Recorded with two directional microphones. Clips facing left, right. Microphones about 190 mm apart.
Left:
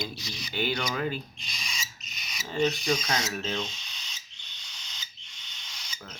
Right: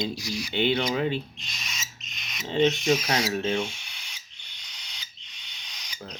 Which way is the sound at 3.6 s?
10° right (ahead or behind).